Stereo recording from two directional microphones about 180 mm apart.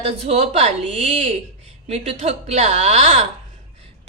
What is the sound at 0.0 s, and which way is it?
Speech, 35° right (ahead or behind).